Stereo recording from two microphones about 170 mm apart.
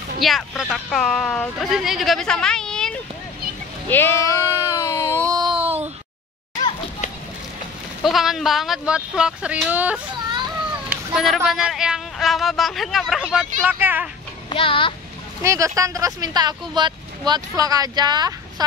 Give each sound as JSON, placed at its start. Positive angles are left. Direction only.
{"t": 0.2, "sound": "speech", "side_deg": 0}
{"t": 4.7, "sound": "a sound", "side_deg": 15}
{"t": 5.2, "sound": "a sound", "side_deg": -25}
{"t": 8.0, "sound": "speech", "side_deg": 0}
{"t": 14.5, "sound": "a child's voice", "side_deg": 30}
{"t": 15.4, "sound": "speech", "side_deg": -20}